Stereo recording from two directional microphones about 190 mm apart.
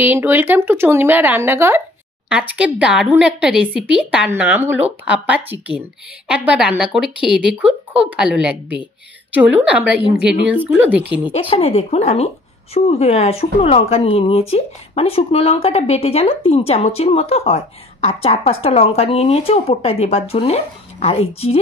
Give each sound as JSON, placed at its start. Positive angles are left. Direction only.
{"t": 0.0, "sound": "speech", "side_deg": -10}
{"t": 11.3, "sound": "speech", "side_deg": 30}